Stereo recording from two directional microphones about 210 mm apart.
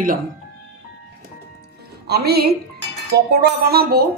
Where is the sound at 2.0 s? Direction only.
50° right (ahead or behind).